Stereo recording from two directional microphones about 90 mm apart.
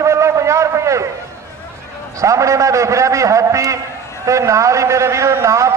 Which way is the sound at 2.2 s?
35° right (ahead or behind).